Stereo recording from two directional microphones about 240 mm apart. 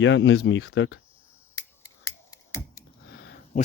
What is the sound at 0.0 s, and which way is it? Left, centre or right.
Speech, left.